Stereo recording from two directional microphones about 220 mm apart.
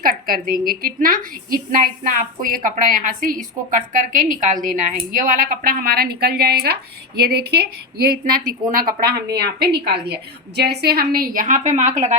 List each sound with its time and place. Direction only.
0.0 s a woman's voice: 40° right (ahead or behind)